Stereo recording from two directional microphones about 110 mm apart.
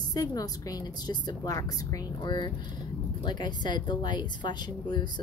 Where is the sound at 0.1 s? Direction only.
35° left (ahead or behind).